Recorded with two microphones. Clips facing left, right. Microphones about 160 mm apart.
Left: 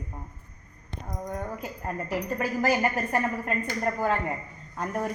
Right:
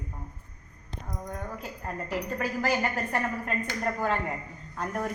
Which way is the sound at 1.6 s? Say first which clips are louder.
Left 3 dB; 10° left (ahead or behind).